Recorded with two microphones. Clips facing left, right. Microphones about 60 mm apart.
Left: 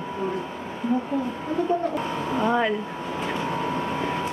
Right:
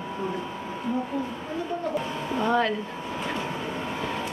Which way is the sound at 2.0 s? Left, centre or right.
Centre.